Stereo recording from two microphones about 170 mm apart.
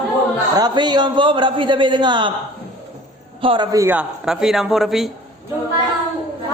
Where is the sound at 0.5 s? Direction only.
25° right (ahead or behind).